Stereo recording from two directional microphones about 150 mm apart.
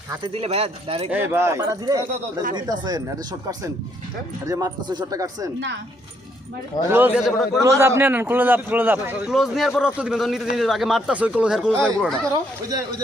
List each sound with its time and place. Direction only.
0.2 s speech: 40° right (ahead or behind)
1.1 s speech: 15° right (ahead or behind)
4.4 s speech: 25° right (ahead or behind)
6.8 s a man's voice: 15° right (ahead or behind)
7.2 s a man's voice: centre (ahead or behind)
7.8 s a man's voice: 15° right (ahead or behind)
9.3 s a man's voice: centre (ahead or behind)
12.3 s speech: 25° right (ahead or behind)